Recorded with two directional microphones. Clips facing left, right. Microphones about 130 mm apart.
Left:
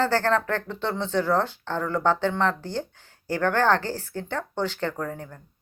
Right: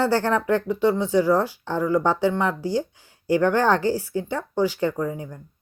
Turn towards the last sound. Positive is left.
turn(degrees=-10)  # may be behind; listen again after turning